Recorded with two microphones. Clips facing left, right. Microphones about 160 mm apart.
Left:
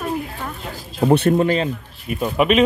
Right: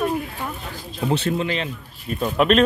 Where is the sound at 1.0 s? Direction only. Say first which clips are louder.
Left 7 dB; 55° left (ahead or behind).